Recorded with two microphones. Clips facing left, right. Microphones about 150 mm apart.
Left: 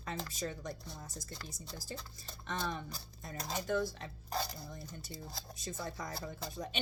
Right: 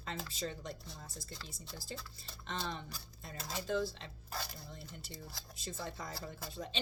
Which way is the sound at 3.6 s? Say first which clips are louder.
Left 1 dB; 25° right (ahead or behind).